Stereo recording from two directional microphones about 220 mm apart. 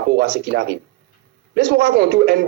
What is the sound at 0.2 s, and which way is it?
A man's voice, 50° right (ahead or behind).